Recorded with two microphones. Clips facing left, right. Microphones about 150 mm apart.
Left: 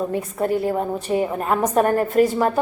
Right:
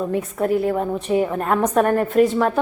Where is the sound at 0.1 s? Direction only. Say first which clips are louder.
Right 2 dB; centre (ahead or behind).